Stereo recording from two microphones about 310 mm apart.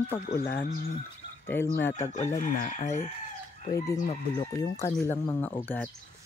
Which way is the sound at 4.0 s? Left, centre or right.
Left.